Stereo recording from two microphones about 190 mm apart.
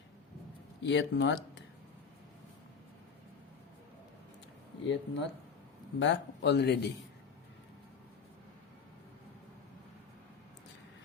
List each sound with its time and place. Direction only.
0.8 s speech: 70° left (ahead or behind)
4.9 s speech: 65° left (ahead or behind)